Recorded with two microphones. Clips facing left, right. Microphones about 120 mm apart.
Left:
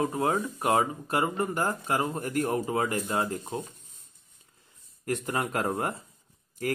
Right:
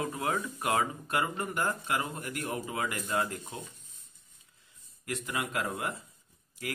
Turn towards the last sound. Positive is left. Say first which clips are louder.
# left 8 dB
turn(degrees=45)  # may be behind; listen again after turning